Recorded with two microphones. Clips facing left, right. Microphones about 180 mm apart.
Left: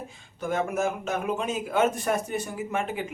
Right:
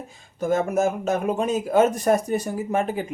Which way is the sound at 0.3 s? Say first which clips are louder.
Right 6 dB; 40° right (ahead or behind).